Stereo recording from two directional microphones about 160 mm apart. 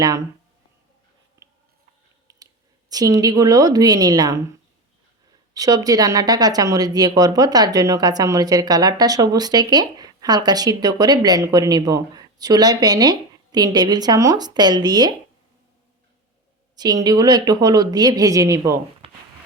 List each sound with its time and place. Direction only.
2.9 s speech: 25° right (ahead or behind)
5.5 s speech: 20° right (ahead or behind)
16.7 s speech: 25° right (ahead or behind)